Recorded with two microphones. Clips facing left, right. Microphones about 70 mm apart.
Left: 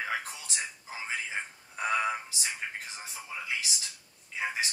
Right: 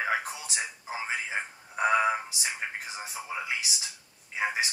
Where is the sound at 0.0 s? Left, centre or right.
Centre.